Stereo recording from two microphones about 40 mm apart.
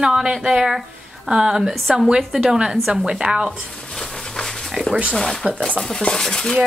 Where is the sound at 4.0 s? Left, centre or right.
Centre.